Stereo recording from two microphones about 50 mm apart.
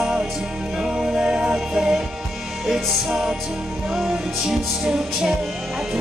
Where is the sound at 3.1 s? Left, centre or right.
Centre.